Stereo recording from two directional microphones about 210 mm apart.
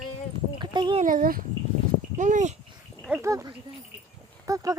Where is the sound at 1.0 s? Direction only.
40° right (ahead or behind).